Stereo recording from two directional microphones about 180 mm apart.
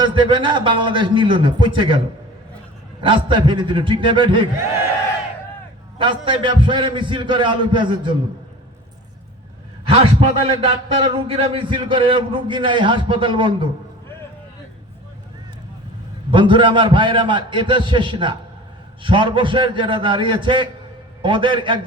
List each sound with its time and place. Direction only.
0.0 s a man's voice: 25° right (ahead or behind)
3.0 s a man's voice: 25° right (ahead or behind)
6.0 s a man's voice: 25° right (ahead or behind)
9.8 s a man's voice: 30° right (ahead or behind)
16.3 s a man's voice: 25° right (ahead or behind)